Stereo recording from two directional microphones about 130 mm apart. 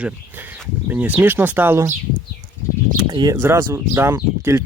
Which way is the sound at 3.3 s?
20° right (ahead or behind).